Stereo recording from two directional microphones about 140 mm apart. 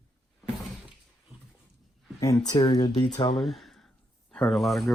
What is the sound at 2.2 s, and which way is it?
Speech, 25° left (ahead or behind).